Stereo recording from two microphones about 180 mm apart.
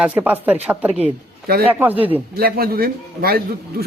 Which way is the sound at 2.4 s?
55° right (ahead or behind).